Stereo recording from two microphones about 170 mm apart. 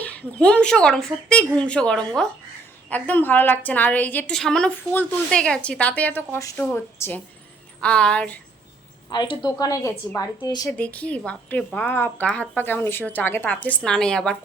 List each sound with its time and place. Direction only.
0.0 s a woman's voice: 10° left (ahead or behind)
9.0 s a woman's voice: 25° left (ahead or behind)
10.8 s a woman's voice: 10° left (ahead or behind)